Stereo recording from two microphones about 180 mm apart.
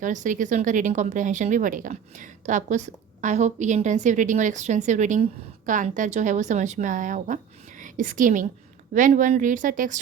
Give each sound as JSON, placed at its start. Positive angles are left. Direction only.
{"t": 0.0, "sound": "speech", "side_deg": -45}